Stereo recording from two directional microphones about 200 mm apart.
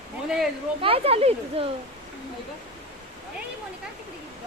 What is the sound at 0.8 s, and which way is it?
Speech, 30° right (ahead or behind).